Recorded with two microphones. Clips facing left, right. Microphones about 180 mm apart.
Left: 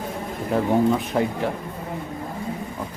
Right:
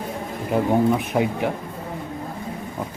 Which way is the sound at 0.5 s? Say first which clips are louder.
Right 1 dB; 15° right (ahead or behind).